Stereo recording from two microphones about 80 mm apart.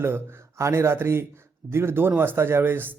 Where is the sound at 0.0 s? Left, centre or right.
Right.